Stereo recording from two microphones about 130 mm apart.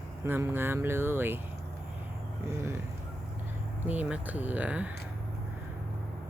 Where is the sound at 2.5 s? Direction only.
20° right (ahead or behind).